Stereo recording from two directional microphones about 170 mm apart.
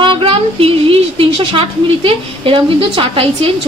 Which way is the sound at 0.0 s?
30° right (ahead or behind).